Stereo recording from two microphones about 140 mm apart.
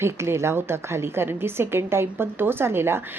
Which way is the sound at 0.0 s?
20° right (ahead or behind).